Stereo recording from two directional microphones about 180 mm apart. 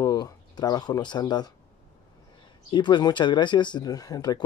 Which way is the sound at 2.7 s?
25° left (ahead or behind).